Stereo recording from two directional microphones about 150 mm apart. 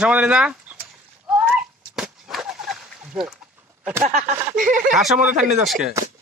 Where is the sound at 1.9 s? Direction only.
Centre (ahead or behind).